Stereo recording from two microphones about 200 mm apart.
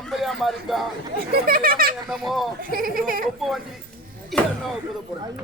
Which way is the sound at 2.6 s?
45° right (ahead or behind).